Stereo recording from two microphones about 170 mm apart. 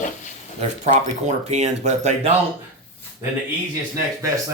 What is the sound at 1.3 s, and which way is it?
Speech, 45° right (ahead or behind).